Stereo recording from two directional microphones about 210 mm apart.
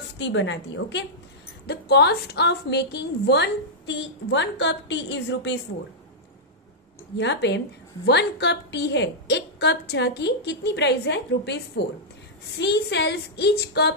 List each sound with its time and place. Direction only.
0.2 s a woman's voice: 60° left (ahead or behind)
7.2 s a woman's voice: 55° left (ahead or behind)